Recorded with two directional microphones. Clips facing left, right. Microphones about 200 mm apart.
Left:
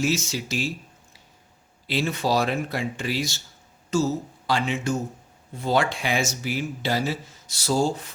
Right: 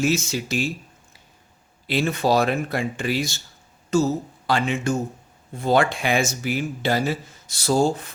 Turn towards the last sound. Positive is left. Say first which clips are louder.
# right 3 dB
turn(degrees=-55)  # may be behind; listen again after turning